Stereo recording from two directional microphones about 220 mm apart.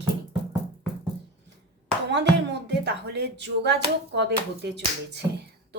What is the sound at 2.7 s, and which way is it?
Speech, 50° right (ahead or behind).